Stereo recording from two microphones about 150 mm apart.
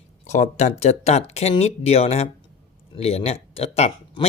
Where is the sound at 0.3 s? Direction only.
50° left (ahead or behind).